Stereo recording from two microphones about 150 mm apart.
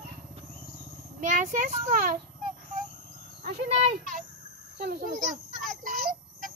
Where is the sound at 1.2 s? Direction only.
60° right (ahead or behind).